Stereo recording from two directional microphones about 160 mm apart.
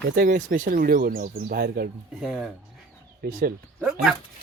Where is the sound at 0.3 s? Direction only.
55° right (ahead or behind); by 1.9 s 75° right (ahead or behind).